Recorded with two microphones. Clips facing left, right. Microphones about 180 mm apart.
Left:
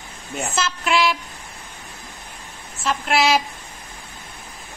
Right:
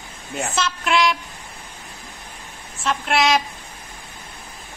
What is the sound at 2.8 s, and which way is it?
Speech, centre (ahead or behind).